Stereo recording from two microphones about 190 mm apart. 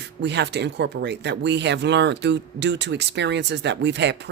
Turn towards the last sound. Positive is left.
turn(degrees=-65)  # may be behind; listen again after turning